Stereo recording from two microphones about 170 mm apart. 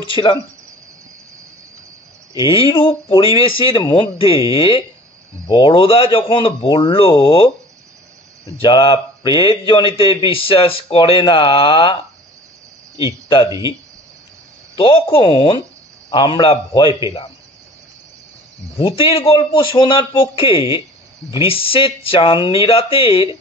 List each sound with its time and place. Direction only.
0.1 s a man's voice: 30° left (ahead or behind)
2.6 s a man's voice: 30° left (ahead or behind)
8.5 s a man's voice: 30° left (ahead or behind)
13.5 s speech: 20° right (ahead or behind)
14.8 s a man's voice: 30° left (ahead or behind)
18.8 s a man's voice: 35° left (ahead or behind)